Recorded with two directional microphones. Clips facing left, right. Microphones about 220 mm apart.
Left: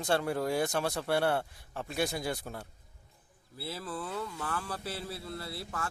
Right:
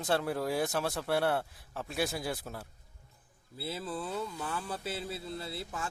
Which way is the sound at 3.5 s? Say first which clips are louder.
Right 1 dB; 25° right (ahead or behind).